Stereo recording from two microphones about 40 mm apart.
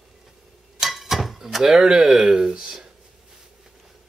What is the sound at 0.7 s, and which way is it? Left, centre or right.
Speech, centre.